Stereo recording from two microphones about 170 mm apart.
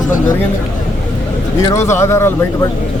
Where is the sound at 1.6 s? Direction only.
15° left (ahead or behind).